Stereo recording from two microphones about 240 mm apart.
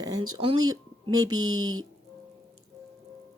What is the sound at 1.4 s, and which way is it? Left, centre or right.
Speech, right.